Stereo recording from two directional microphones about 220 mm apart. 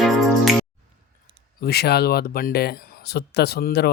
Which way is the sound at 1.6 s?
45° left (ahead or behind).